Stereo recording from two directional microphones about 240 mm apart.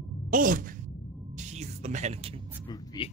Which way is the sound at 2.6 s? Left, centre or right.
Centre.